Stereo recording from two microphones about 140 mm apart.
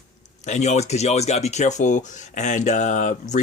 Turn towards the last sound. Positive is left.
turn(degrees=60)  # may be behind; listen again after turning